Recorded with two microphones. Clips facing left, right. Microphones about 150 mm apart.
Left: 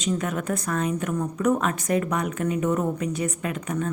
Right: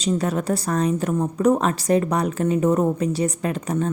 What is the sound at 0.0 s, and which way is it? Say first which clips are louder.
A woman's voice: right 4 dB; 35° right (ahead or behind).